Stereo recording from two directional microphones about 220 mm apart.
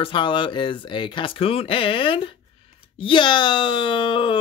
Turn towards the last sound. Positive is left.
turn(degrees=25)  # may be behind; listen again after turning